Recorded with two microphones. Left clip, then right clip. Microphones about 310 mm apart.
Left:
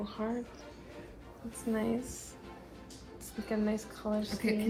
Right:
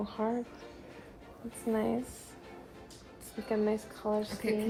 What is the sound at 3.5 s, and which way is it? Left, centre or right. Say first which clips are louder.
Speech: right 4 dB; right.